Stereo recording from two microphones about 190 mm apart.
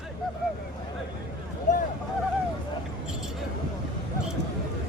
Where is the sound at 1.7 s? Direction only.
40° left (ahead or behind).